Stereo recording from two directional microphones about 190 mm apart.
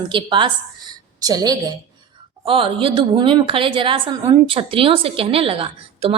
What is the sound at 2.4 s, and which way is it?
A woman's voice, 30° right (ahead or behind).